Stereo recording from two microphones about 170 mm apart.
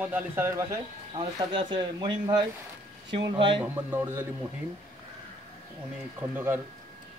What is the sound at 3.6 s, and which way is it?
Speech, 10° right (ahead or behind).